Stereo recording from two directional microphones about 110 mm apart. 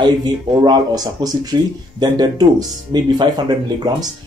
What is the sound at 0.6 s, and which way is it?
Speech, 40° right (ahead or behind).